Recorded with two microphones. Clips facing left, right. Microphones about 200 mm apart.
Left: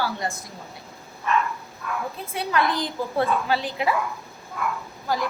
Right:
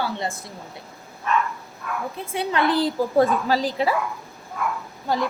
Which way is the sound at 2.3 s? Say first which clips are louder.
Right 3 dB; 25° right (ahead or behind).